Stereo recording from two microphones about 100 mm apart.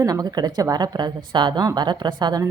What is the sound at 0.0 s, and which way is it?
A woman's voice, 40° right (ahead or behind).